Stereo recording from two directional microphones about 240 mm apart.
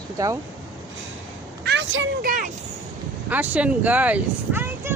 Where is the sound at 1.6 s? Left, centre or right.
Right.